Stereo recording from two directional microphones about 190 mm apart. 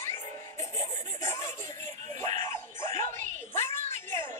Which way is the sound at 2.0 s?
40° right (ahead or behind).